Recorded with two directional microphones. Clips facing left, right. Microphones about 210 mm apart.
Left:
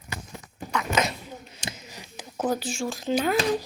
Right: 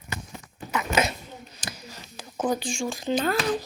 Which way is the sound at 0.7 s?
5° right (ahead or behind).